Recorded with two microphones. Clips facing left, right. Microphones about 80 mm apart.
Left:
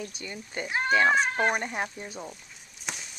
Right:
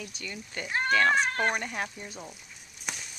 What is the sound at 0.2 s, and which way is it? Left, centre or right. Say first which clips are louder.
Speech: left 2 dB; left.